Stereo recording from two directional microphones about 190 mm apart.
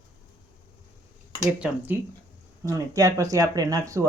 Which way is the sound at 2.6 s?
15° right (ahead or behind).